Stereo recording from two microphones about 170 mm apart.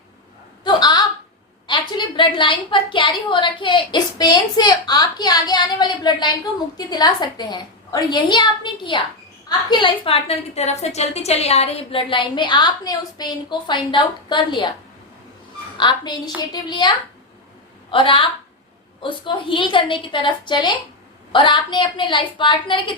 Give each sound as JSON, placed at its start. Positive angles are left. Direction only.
{"t": 0.6, "sound": "a sound", "side_deg": 25}
{"t": 1.6, "sound": "a woman's voice", "side_deg": 30}
{"t": 15.8, "sound": "a woman's voice", "side_deg": 25}
{"t": 17.9, "sound": "a woman's voice", "side_deg": 30}